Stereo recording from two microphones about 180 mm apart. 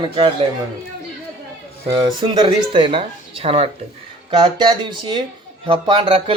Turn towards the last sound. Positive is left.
turn(degrees=-30)  # may be behind; listen again after turning